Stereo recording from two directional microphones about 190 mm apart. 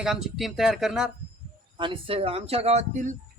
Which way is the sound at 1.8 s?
30° right (ahead or behind).